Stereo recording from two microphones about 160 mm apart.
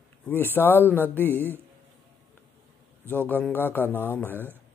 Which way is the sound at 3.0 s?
10° left (ahead or behind).